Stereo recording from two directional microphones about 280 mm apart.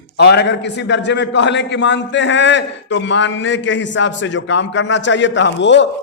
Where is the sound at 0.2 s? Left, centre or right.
Left.